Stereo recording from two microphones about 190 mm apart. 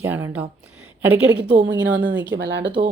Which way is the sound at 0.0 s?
10° right (ahead or behind).